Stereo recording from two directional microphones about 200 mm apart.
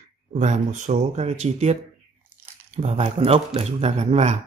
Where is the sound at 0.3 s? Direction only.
35° right (ahead or behind).